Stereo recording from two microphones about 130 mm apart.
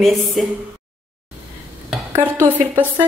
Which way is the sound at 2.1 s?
15° right (ahead or behind).